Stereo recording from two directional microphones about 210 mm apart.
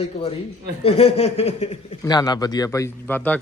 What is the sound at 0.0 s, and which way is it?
Speech, 30° left (ahead or behind).